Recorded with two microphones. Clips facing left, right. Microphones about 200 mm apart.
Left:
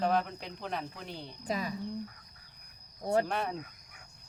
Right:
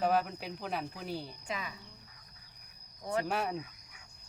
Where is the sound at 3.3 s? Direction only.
5° right (ahead or behind).